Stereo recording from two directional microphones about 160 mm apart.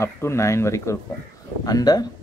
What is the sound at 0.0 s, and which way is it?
A man's voice, 15° left (ahead or behind).